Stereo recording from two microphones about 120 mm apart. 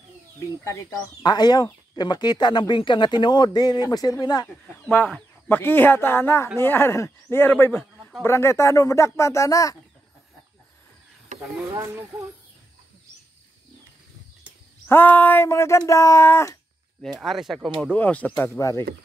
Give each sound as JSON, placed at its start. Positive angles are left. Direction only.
{"t": 0.9, "sound": "speech", "side_deg": 35}
{"t": 4.9, "sound": "speech", "side_deg": 15}
{"t": 11.7, "sound": "speech", "side_deg": -30}
{"t": 14.9, "sound": "speech", "side_deg": 15}
{"t": 17.2, "sound": "speech", "side_deg": 0}
{"t": 17.9, "sound": "speech", "side_deg": 15}